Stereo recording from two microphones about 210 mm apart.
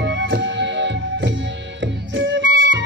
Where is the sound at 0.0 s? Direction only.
55° right (ahead or behind).